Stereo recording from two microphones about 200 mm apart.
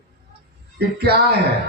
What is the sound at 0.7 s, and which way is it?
Speech, 55° right (ahead or behind).